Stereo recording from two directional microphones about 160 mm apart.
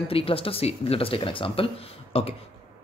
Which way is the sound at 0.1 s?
35° left (ahead or behind).